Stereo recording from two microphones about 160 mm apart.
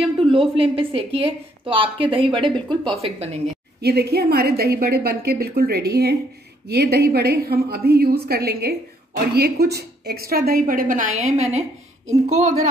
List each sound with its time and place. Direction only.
0.0 s a woman's voice: 35° right (ahead or behind)
3.8 s a woman's voice: 90° right; by 12.5 s 45° right (ahead or behind)